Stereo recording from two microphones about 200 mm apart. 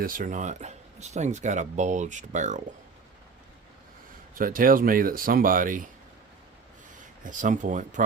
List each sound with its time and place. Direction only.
0.0 s speech: 45° right (ahead or behind)
4.4 s speech: 45° right (ahead or behind)
7.3 s speech: 40° right (ahead or behind)